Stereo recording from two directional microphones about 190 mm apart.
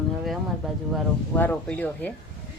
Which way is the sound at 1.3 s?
10° left (ahead or behind).